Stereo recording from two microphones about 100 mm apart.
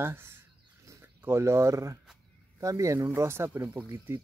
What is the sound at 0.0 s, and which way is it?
Speech, 25° right (ahead or behind).